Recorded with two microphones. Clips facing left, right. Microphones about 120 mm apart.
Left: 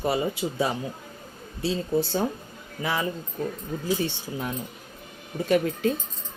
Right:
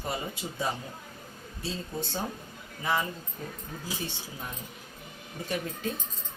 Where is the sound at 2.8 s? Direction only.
90° left.